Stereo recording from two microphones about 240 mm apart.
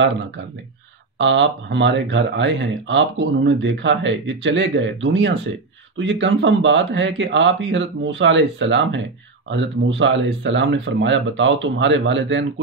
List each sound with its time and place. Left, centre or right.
1.1 s speech: right